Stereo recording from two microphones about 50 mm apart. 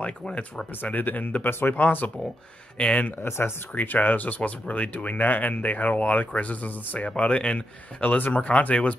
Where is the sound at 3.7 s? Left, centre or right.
Left.